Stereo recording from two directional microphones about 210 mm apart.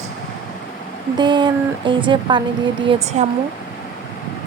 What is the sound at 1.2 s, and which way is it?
Speech, 20° right (ahead or behind).